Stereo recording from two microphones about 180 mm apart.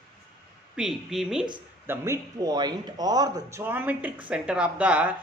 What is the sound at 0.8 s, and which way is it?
Speech, centre (ahead or behind).